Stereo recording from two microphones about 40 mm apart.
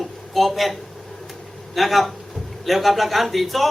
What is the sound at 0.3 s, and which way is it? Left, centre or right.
A man's voice, centre.